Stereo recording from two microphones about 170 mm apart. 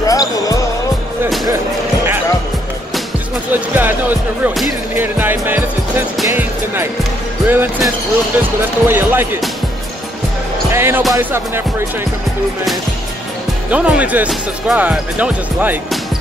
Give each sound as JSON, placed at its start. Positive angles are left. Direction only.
{"t": 0.0, "sound": "basketball bounce", "side_deg": 20}
{"t": 3.7, "sound": "speech", "side_deg": -10}
{"t": 6.3, "sound": "music", "side_deg": -10}
{"t": 7.4, "sound": "speech", "side_deg": -10}
{"t": 10.7, "sound": "speech", "side_deg": -15}
{"t": 13.7, "sound": "speech", "side_deg": -5}